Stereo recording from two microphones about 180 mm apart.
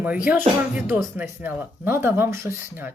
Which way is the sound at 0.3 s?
5° right (ahead or behind).